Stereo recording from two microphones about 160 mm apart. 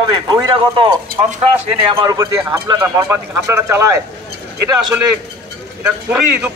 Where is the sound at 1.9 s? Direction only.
25° right (ahead or behind).